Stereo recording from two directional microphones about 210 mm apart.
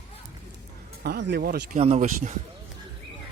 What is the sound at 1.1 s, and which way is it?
Speech, 55° right (ahead or behind).